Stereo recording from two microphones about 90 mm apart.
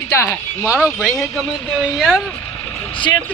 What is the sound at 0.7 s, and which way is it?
Speech, 15° right (ahead or behind).